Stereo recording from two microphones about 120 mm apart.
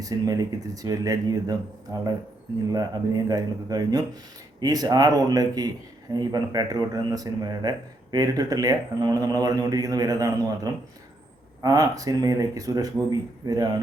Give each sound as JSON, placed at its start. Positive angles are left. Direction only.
{"t": 0.0, "sound": "a man's voice", "side_deg": -30}